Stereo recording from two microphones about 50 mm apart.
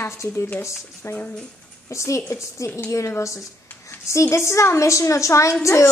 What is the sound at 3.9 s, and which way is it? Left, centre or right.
A woman's voice, left.